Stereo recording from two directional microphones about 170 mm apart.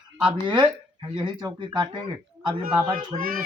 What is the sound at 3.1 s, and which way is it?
Speech, 30° right (ahead or behind).